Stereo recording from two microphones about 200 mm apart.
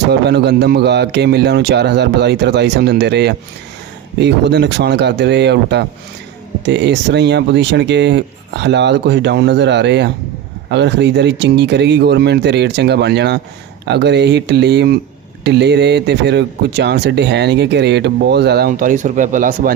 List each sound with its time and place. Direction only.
0.1 s speech: 55° right (ahead or behind)